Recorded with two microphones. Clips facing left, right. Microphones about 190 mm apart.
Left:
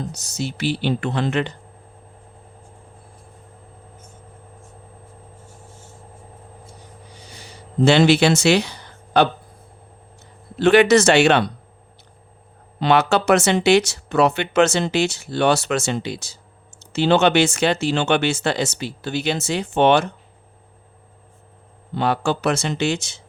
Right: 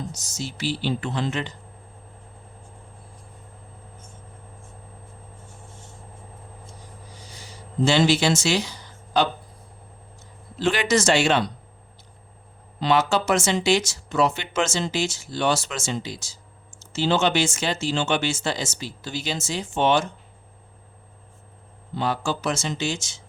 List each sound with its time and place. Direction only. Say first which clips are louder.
0.1 s speech: left 6 dB; 60° left (ahead or behind)
7.3 s a sound: left 2 dB; 65° left (ahead or behind)
10.6 s speech: left 9 dB; 65° left (ahead or behind)
12.8 s speech: left 4 dB; 65° left (ahead or behind)
21.9 s speech: left 5 dB; 65° left (ahead or behind)